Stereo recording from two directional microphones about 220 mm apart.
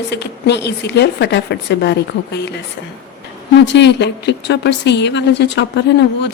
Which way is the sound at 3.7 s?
50° left (ahead or behind).